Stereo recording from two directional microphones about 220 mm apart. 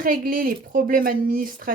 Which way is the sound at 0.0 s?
40° right (ahead or behind).